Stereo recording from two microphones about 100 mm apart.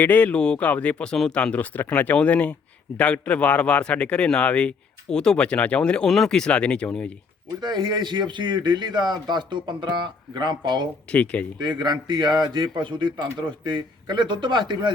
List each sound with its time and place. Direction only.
0.0 s a man's voice: 15° left (ahead or behind)
7.6 s speech: 45° right (ahead or behind)
11.1 s a man's voice: 15° left (ahead or behind)
11.6 s speech: 45° right (ahead or behind)